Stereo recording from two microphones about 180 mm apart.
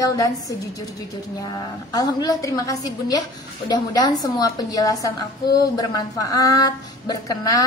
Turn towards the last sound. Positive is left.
turn(degrees=20)  # may be behind; listen again after turning